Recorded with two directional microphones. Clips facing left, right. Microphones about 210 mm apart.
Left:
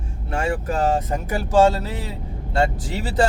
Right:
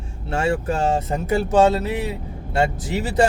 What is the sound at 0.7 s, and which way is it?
Speech, 25° right (ahead or behind).